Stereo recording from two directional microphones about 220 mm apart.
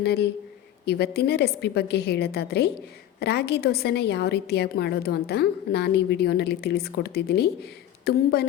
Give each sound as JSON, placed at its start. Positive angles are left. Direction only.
{"t": 0.0, "sound": "a woman's voice", "side_deg": 50}